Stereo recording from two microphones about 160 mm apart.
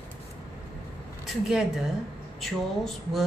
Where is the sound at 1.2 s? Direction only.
Centre (ahead or behind).